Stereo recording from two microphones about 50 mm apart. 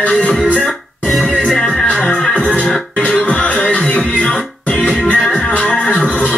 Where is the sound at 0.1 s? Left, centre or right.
Left.